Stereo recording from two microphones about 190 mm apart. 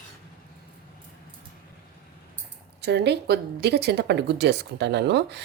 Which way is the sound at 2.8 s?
60° right (ahead or behind).